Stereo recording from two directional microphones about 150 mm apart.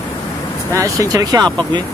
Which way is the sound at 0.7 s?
20° right (ahead or behind).